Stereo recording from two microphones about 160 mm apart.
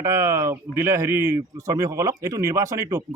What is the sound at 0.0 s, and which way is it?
Speech, 20° right (ahead or behind).